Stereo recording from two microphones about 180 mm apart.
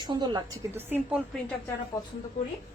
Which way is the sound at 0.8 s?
10° right (ahead or behind).